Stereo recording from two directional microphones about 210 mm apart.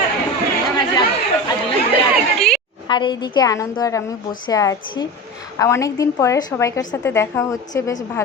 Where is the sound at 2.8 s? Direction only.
20° left (ahead or behind).